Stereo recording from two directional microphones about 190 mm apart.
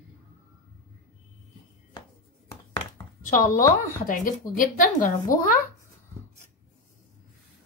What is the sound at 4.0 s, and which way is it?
Speech, 45° left (ahead or behind).